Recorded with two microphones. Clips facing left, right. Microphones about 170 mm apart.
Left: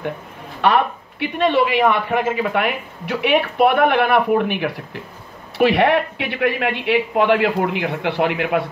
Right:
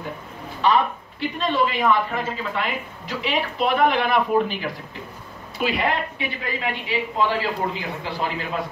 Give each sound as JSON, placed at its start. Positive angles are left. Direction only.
{"t": 0.6, "sound": "a woman's voice", "side_deg": 65}